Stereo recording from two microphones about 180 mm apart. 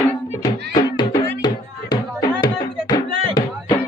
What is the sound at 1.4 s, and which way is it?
Music, 20° left (ahead or behind).